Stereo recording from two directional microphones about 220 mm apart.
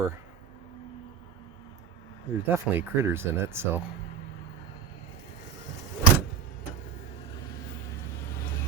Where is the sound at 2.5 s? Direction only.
10° right (ahead or behind).